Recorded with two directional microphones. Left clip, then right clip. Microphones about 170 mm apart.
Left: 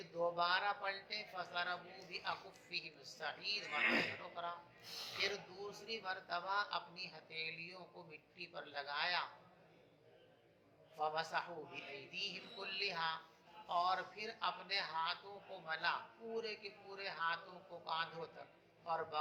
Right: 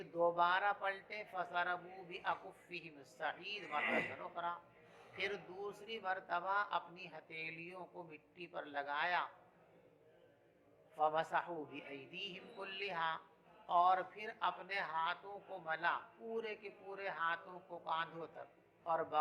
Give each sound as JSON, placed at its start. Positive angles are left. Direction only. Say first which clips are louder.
{"t": 0.0, "sound": "a man's voice", "louder": "right 4 dB", "side_deg": -50}
{"t": 10.9, "sound": "a man's voice", "louder": "right 4 dB", "side_deg": -45}